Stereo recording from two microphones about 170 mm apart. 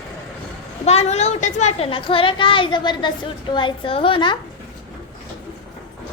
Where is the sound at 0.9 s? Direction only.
40° left (ahead or behind).